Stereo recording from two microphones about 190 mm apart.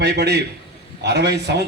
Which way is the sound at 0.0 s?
60° right (ahead or behind).